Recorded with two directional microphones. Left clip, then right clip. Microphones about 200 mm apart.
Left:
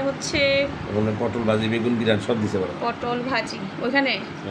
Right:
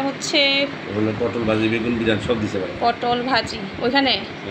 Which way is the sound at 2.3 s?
50° left (ahead or behind).